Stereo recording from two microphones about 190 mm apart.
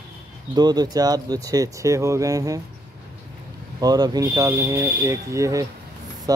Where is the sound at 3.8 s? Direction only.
20° right (ahead or behind).